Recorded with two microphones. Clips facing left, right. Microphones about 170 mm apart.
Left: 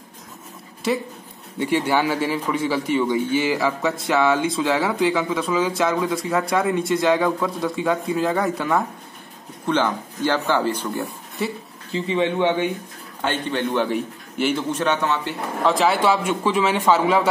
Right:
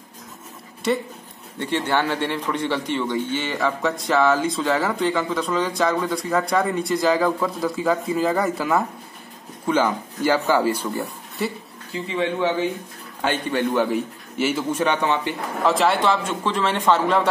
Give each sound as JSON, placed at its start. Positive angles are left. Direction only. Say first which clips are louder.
{"t": 0.8, "sound": "a man's voice", "louder": "even", "side_deg": 0}
{"t": 11.9, "sound": "speech", "louder": "left 3 dB", "side_deg": 20}
{"t": 13.2, "sound": "a man's voice", "louder": "right 1 dB", "side_deg": -10}
{"t": 15.6, "sound": "a man's voice", "louder": "left 1 dB", "side_deg": 0}